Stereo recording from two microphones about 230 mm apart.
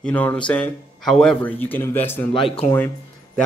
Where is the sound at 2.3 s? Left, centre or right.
Left.